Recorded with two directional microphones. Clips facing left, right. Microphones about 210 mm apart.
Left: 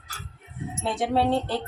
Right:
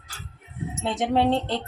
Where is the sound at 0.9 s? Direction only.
20° right (ahead or behind).